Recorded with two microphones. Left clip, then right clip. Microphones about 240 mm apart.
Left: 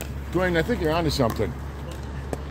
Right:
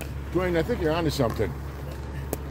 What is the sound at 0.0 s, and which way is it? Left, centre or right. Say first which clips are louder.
Speech: left 3 dB; left.